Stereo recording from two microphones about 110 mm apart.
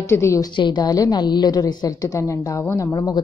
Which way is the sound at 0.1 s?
25° left (ahead or behind).